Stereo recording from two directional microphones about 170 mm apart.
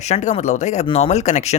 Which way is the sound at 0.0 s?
45° left (ahead or behind).